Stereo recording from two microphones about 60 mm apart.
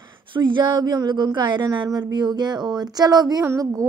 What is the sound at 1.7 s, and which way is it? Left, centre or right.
Speech, right.